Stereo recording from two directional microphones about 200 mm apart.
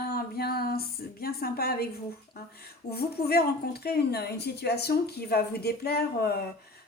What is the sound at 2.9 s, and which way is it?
A woman's voice, 50° left (ahead or behind).